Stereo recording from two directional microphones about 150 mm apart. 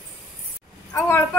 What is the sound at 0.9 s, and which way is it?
Speech, 15° left (ahead or behind).